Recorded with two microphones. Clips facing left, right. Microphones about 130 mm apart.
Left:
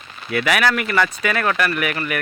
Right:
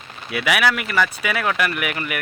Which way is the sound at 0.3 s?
10° right (ahead or behind).